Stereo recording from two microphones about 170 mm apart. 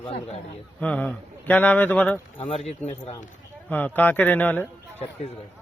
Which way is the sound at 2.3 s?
35° left (ahead or behind).